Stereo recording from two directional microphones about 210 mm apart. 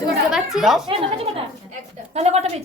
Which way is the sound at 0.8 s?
25° right (ahead or behind).